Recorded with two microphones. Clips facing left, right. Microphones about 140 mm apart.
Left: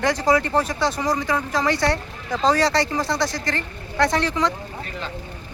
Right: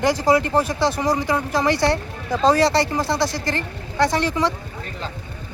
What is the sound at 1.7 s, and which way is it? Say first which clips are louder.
Speech: right 2 dB; 35° right (ahead or behind).